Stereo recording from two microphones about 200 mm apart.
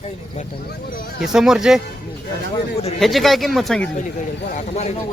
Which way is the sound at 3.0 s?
Centre (ahead or behind).